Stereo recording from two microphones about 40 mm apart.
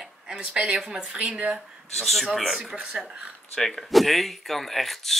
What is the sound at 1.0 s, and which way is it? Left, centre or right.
Speech, right.